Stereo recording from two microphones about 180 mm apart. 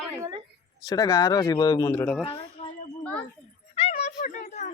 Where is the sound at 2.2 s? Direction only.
30° left (ahead or behind).